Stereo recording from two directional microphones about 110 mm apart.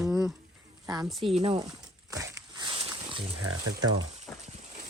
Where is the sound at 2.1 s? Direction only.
30° right (ahead or behind).